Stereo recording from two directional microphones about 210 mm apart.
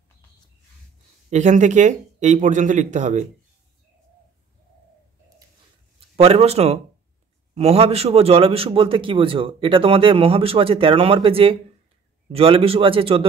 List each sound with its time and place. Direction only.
1.3 s speech: 35° right (ahead or behind)
5.9 s a man's voice: 30° right (ahead or behind)